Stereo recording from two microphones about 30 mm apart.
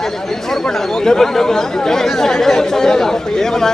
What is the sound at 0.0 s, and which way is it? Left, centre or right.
Speech, centre.